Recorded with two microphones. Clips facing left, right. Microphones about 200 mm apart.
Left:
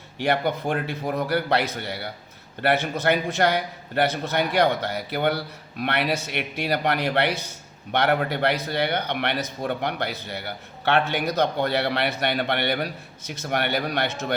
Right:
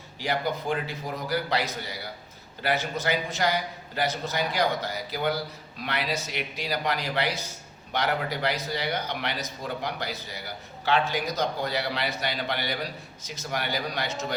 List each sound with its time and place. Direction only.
0.2 s a man's voice: 60° left (ahead or behind)